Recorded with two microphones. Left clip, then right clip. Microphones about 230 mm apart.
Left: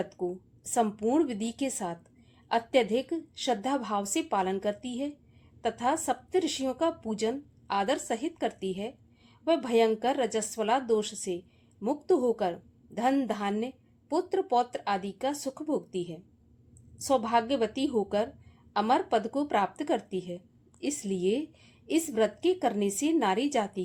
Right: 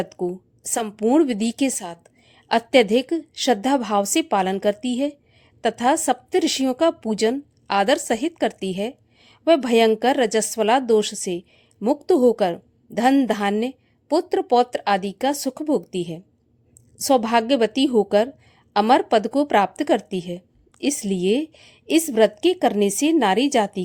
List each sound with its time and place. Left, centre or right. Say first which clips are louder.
0.0 s speech: right 7 dB; right